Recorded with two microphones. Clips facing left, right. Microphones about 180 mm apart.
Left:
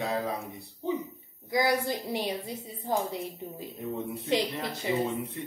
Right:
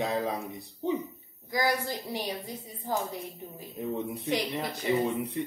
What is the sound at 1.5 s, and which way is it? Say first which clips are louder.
A woman's voice: left 2 dB; 20° left (ahead or behind).